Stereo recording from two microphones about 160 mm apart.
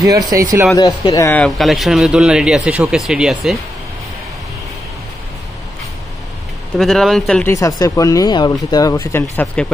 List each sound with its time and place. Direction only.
0.0 s speech: 20° right (ahead or behind)
1.1 s speech: 15° left (ahead or behind)
1.4 s speech: centre (ahead or behind)
6.8 s speech: centre (ahead or behind)
7.4 s speech: 20° left (ahead or behind)
9.6 s speech: 5° left (ahead or behind)